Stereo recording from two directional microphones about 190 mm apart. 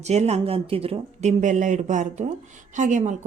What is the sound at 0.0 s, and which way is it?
A woman's voice, 35° right (ahead or behind).